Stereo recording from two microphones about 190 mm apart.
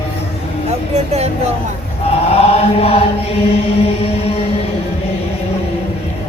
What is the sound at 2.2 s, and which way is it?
Chant, 30° left (ahead or behind).